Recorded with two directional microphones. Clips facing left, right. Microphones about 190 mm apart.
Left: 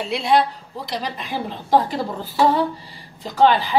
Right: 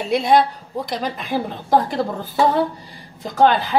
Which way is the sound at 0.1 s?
45° right (ahead or behind).